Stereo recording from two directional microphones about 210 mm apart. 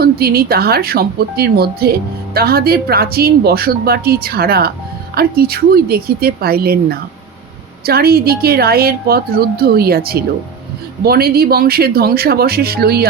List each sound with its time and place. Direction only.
0.0 s speech: 45° right (ahead or behind)